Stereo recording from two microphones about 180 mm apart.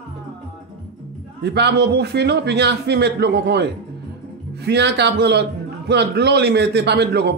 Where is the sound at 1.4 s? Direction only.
70° right (ahead or behind).